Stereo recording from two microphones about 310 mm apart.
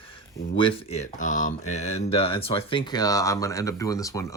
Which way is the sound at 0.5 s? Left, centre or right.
Centre.